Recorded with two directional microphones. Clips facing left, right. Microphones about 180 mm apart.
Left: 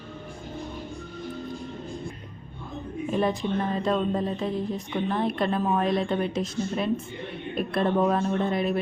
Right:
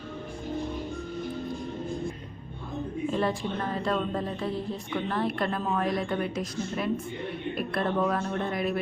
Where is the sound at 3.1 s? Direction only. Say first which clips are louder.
Left 5 dB; 20° left (ahead or behind).